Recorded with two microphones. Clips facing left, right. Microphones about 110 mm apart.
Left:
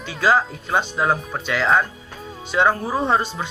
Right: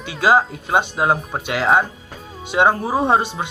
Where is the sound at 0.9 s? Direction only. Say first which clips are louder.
Right 2 dB; 20° right (ahead or behind).